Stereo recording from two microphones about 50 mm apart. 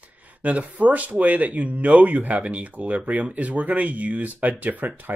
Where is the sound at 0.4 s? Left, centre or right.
Right.